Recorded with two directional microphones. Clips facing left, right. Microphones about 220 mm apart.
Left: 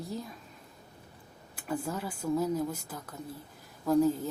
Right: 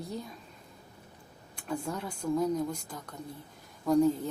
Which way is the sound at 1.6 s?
5° left (ahead or behind).